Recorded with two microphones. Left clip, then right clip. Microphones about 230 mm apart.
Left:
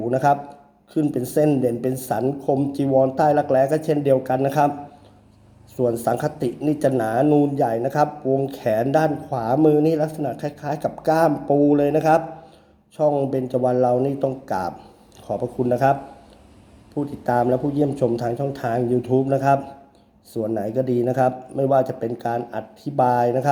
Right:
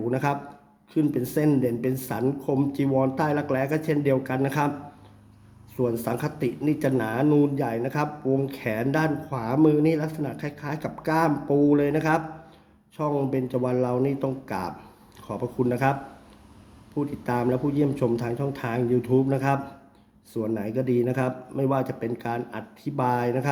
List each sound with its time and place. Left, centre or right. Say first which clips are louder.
0.1 s speech: left 11 dB; centre
5.7 s speech: left 6 dB; centre
17.2 s speech: left 7 dB; centre